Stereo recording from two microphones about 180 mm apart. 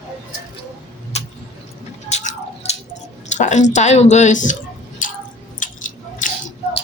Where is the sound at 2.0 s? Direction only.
40° left (ahead or behind).